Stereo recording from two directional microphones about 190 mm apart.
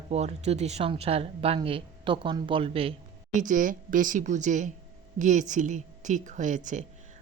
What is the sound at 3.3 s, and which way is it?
A woman's voice, 40° right (ahead or behind).